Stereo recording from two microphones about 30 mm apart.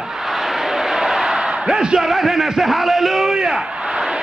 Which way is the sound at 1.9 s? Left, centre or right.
Centre.